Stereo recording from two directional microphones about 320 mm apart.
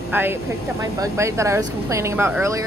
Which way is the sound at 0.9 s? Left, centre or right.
Centre.